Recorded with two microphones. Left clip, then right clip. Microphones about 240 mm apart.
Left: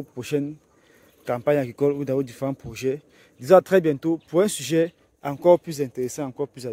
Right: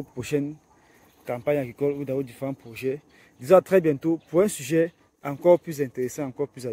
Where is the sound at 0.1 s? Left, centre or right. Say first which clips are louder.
Left 1 dB; centre.